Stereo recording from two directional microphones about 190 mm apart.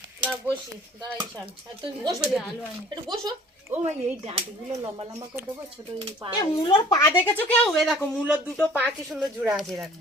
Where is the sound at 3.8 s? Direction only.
35° right (ahead or behind).